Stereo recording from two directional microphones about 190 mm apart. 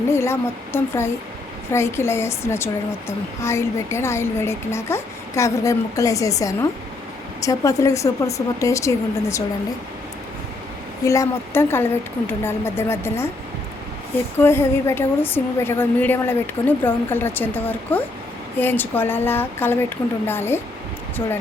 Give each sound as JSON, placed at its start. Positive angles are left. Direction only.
{"t": 0.1, "sound": "a woman's voice", "side_deg": 15}
{"t": 11.0, "sound": "a woman's voice", "side_deg": 15}
{"t": 14.3, "sound": "a woman's voice", "side_deg": 10}